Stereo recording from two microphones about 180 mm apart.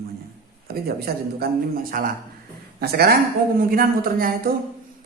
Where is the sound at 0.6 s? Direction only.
60° right (ahead or behind).